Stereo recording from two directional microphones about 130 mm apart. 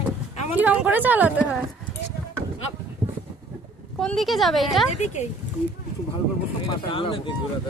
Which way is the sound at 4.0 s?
Centre (ahead or behind).